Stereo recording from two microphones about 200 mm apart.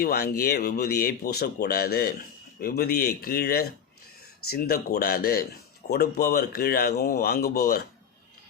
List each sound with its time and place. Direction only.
0.0 s speech: 50° left (ahead or behind)